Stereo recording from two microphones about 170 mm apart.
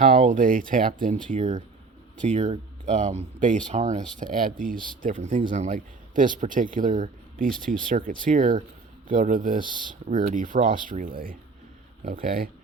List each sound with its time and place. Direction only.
0.0 s speech: 50° right (ahead or behind)